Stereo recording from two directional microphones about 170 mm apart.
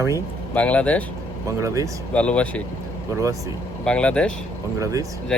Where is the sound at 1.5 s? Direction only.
20° right (ahead or behind).